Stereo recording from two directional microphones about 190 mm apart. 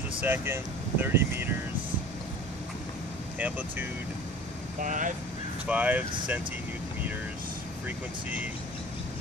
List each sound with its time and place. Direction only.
0.2 s speech: 10° right (ahead or behind)
3.3 s speech: 10° right (ahead or behind)
4.7 s speech: 45° right (ahead or behind)
5.7 s speech: 10° right (ahead or behind)